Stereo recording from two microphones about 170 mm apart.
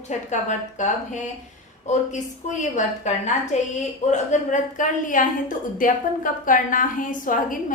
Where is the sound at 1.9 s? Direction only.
45° left (ahead or behind).